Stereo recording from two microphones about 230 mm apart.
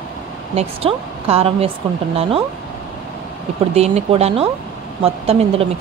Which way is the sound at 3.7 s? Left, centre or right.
Right.